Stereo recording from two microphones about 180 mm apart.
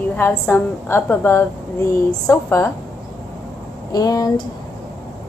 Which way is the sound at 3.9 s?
20° left (ahead or behind).